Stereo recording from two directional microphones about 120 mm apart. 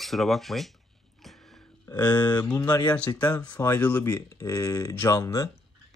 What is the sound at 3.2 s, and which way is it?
Speech, 10° left (ahead or behind).